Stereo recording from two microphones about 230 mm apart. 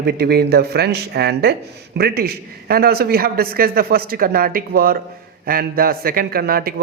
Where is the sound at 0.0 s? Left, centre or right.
Right.